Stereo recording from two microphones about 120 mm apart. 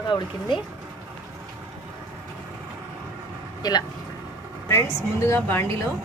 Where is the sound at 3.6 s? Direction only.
35° left (ahead or behind).